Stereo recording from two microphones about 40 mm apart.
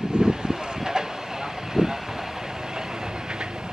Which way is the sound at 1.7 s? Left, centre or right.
Centre.